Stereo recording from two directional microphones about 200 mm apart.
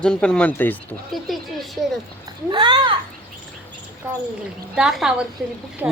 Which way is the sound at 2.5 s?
25° right (ahead or behind).